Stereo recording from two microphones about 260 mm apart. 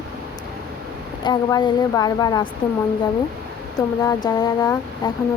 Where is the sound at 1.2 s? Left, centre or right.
Centre.